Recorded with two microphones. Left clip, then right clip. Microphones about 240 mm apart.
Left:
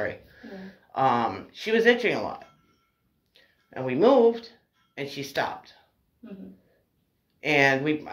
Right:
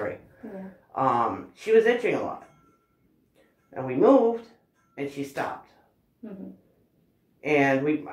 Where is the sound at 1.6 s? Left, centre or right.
Left.